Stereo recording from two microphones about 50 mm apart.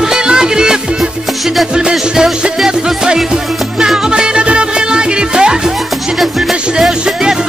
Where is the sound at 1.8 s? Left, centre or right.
Centre.